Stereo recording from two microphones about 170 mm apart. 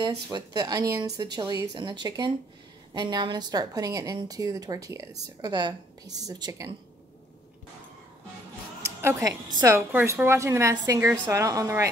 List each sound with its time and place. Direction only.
0.3 s a woman's voice: 20° right (ahead or behind)
8.8 s a sound: 15° right (ahead or behind)
9.6 s a woman's voice: 15° right (ahead or behind)